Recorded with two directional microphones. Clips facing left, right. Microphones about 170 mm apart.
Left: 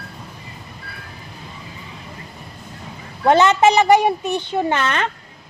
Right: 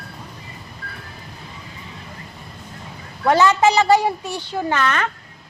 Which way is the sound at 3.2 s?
20° left (ahead or behind).